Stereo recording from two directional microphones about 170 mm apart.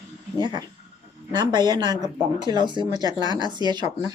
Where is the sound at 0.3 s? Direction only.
25° right (ahead or behind).